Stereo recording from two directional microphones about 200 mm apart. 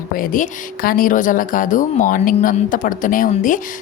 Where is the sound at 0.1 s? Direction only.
45° left (ahead or behind).